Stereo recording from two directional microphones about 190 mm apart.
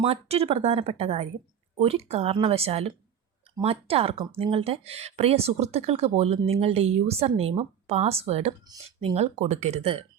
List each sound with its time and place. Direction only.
0.0 s speech: 30° right (ahead or behind)